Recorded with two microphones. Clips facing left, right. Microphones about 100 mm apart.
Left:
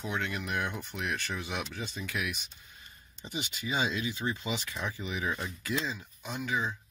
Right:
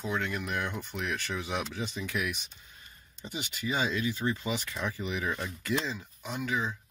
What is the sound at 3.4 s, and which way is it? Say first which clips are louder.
Speech: right 1 dB; 15° left (ahead or behind).